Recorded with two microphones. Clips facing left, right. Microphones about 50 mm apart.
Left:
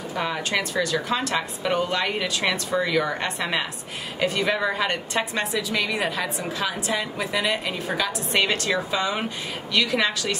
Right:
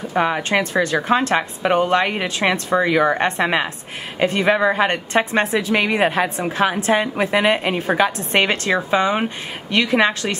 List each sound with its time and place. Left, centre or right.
0.1 s a woman's voice: right